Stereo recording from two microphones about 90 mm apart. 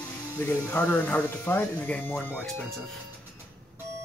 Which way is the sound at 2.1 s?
5° left (ahead or behind).